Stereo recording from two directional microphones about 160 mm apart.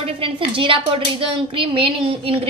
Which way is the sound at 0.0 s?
35° right (ahead or behind).